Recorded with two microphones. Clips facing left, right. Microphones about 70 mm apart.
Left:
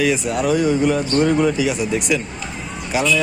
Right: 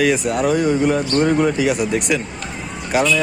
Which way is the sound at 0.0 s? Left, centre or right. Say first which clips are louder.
Right 2 dB; right.